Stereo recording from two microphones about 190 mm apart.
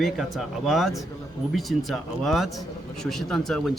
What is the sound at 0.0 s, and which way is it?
A man's voice, centre (ahead or behind).